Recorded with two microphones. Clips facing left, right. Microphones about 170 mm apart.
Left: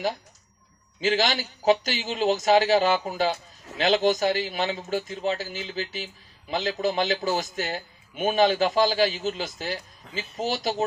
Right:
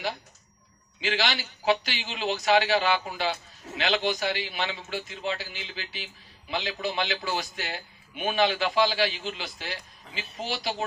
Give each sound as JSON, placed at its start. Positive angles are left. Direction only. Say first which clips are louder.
{"t": 1.0, "sound": "a man's voice", "louder": "left 5 dB", "side_deg": 45}